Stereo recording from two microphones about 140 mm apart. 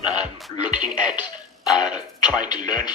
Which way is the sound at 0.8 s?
10° right (ahead or behind).